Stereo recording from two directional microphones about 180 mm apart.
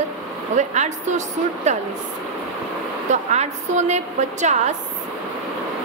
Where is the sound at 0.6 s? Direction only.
40° right (ahead or behind).